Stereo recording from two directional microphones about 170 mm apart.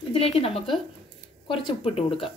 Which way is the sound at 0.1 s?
35° left (ahead or behind).